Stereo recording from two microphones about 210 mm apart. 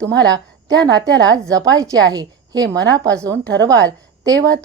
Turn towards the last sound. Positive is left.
turn(degrees=-15)  # may be behind; listen again after turning